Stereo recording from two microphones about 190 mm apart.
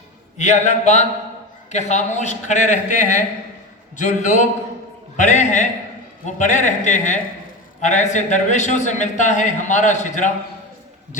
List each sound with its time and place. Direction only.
0.3 s a man's voice: 40° left (ahead or behind)